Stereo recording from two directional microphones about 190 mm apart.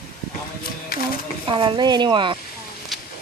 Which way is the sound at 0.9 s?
55° left (ahead or behind).